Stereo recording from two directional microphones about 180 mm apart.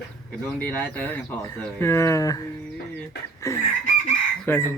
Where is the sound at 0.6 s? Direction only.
10° left (ahead or behind).